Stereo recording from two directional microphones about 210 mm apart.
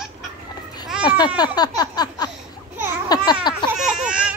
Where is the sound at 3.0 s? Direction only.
20° left (ahead or behind).